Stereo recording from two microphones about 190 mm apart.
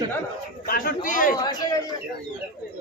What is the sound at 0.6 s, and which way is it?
Speech, 50° left (ahead or behind).